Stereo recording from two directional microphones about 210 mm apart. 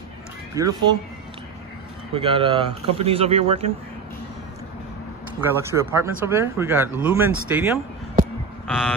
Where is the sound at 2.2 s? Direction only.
25° right (ahead or behind).